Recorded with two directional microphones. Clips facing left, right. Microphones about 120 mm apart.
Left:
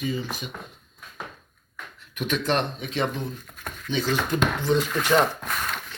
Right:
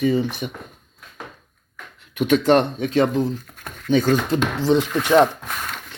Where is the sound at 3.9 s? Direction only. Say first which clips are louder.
Right 9 dB; 50° right (ahead or behind).